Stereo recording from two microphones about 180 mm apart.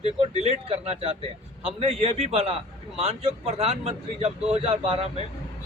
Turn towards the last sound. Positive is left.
turn(degrees=-35)  # may be behind; listen again after turning